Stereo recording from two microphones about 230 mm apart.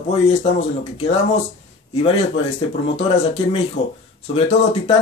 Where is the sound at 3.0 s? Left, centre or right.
Left.